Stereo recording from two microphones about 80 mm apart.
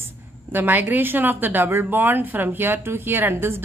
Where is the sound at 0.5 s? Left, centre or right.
Right.